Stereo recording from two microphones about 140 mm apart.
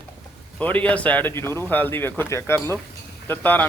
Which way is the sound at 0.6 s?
10° left (ahead or behind).